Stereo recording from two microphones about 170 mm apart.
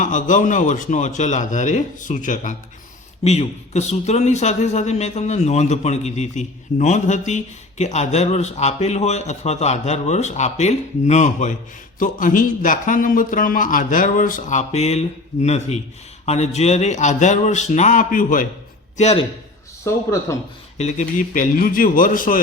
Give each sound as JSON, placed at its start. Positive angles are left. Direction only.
{"t": 0.0, "sound": "a man's voice", "side_deg": 50}
{"t": 18.9, "sound": "a man's voice", "side_deg": 40}
{"t": 19.8, "sound": "speech", "side_deg": 15}
{"t": 20.7, "sound": "a man's voice", "side_deg": 45}